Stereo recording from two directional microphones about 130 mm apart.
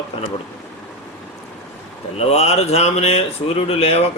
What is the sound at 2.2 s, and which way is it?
A man's voice, 55° left (ahead or behind).